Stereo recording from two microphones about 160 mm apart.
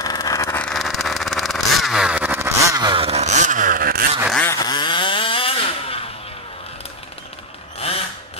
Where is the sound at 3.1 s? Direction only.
45° right (ahead or behind); by 4.0 s 65° right (ahead or behind).